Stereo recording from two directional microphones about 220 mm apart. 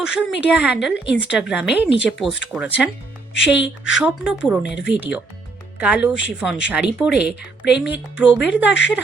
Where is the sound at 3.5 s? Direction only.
60° left (ahead or behind).